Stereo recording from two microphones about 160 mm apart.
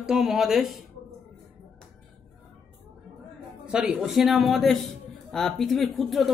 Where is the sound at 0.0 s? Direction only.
5° right (ahead or behind).